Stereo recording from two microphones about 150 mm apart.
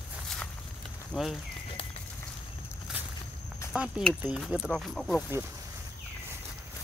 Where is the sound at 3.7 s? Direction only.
5° right (ahead or behind).